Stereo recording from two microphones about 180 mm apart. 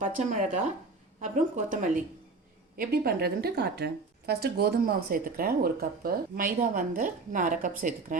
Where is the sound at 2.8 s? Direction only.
60° right (ahead or behind).